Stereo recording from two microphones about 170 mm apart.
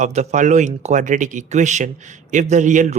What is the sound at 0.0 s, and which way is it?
Speech, 45° right (ahead or behind).